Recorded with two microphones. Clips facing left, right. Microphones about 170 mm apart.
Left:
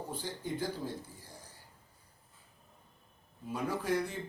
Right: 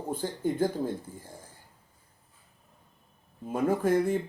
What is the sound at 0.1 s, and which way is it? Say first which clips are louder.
Speech: right 12 dB; 50° right (ahead or behind).